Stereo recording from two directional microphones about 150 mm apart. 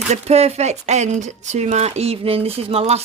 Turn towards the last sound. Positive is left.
turn(degrees=-45)  # may be behind; listen again after turning